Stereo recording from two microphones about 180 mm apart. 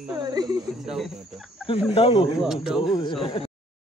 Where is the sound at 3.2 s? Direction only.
30° left (ahead or behind).